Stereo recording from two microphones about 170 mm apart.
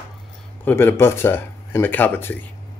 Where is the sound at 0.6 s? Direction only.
10° left (ahead or behind).